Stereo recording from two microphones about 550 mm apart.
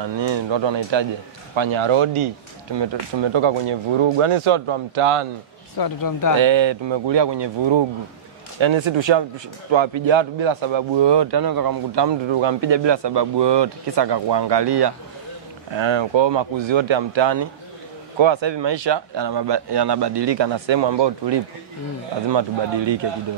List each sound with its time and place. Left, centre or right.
0.0 s a man's voice: right
2.7 s speech: right
5.8 s speech: left
6.3 s a man's voice: right